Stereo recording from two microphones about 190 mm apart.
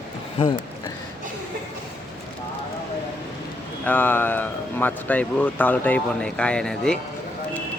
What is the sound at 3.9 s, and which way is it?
Speech, 10° left (ahead or behind).